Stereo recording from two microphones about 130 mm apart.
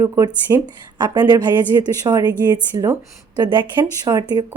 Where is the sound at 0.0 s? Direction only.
25° right (ahead or behind).